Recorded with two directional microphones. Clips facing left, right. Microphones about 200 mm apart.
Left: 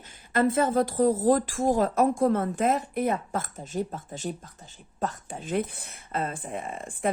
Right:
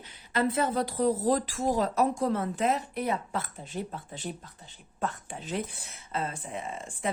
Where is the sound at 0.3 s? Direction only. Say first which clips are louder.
Left 4 dB; 50° left (ahead or behind).